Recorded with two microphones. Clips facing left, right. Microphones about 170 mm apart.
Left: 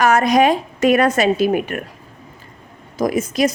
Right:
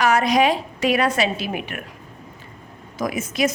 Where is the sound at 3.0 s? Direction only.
35° left (ahead or behind).